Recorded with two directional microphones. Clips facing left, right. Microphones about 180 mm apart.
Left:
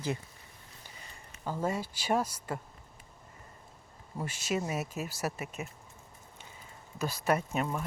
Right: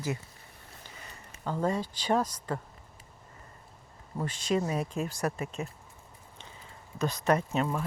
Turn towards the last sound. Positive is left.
turn(degrees=10)  # may be behind; listen again after turning